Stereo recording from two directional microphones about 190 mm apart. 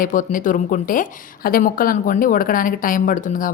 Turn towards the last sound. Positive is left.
turn(degrees=45)  # may be behind; listen again after turning